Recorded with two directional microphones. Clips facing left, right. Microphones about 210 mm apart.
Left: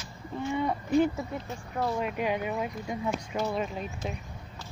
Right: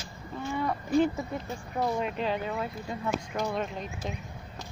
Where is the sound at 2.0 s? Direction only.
10° left (ahead or behind).